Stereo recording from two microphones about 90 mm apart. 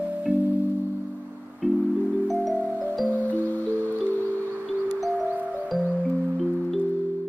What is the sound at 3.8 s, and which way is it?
Music, 20° left (ahead or behind).